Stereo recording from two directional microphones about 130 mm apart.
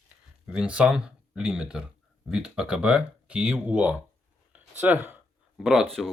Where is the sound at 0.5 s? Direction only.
10° right (ahead or behind).